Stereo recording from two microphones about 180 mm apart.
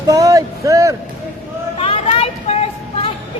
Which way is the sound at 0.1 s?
20° right (ahead or behind).